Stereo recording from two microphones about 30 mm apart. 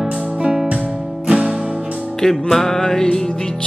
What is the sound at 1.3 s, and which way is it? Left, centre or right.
Music, right.